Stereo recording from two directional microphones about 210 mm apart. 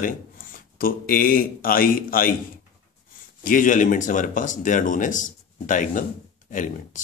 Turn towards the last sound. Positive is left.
turn(degrees=40)  # may be behind; listen again after turning